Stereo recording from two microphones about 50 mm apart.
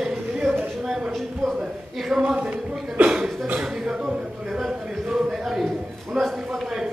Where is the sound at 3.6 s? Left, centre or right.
Centre.